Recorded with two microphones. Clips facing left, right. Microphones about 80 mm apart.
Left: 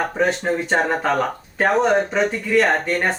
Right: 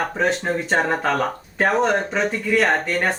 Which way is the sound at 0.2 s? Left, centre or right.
Centre.